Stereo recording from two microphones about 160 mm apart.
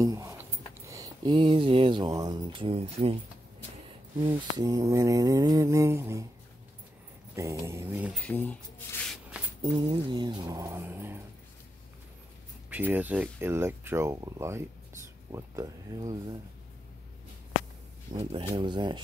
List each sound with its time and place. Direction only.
0.0 s speech: 20° right (ahead or behind); by 3.2 s 40° right (ahead or behind)
4.2 s mantra: 30° right (ahead or behind)
7.6 s speech: 15° right (ahead or behind)
8.1 s speech: 10° left (ahead or behind)
9.7 s mantra: 30° right (ahead or behind); by 11.1 s 15° right (ahead or behind)
12.6 s speech: 10° right (ahead or behind)
15.3 s mantra: 20° right (ahead or behind)
18.1 s speech: 35° right (ahead or behind)
18.5 s mantra: 30° right (ahead or behind)